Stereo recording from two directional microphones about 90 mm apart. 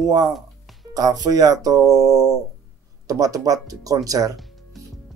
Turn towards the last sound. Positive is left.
turn(degrees=-40)  # may be behind; listen again after turning